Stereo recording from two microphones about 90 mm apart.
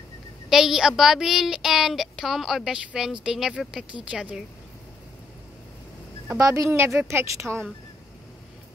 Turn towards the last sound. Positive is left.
turn(degrees=-30)  # may be behind; listen again after turning